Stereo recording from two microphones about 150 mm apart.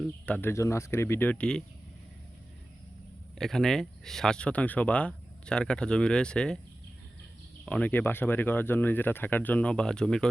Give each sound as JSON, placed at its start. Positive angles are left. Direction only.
{"t": 0.0, "sound": "speech", "side_deg": 10}
{"t": 0.5, "sound": "speech", "side_deg": 20}
{"t": 3.3, "sound": "speech", "side_deg": 5}
{"t": 7.6, "sound": "speech", "side_deg": 10}